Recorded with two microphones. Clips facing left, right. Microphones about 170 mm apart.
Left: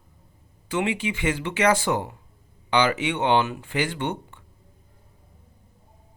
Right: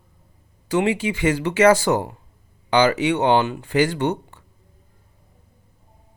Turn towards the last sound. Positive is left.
turn(degrees=-40)  # may be behind; listen again after turning